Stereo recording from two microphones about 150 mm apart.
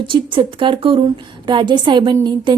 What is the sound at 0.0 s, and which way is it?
A woman's voice, 30° right (ahead or behind).